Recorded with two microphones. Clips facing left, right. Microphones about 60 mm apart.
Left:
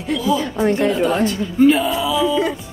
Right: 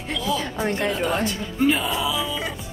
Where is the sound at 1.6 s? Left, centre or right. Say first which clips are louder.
Left 7 dB; centre.